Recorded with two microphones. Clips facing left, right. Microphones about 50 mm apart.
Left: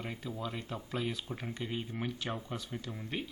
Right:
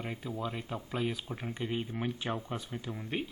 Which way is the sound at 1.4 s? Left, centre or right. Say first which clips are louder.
Right 4 dB; centre.